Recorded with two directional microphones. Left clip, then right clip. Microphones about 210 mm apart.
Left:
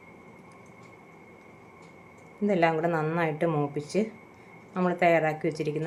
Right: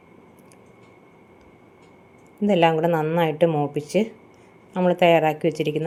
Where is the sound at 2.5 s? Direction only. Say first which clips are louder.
Right 6 dB; 25° right (ahead or behind).